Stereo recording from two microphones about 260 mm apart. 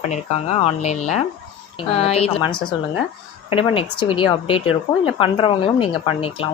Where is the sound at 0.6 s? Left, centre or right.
Left.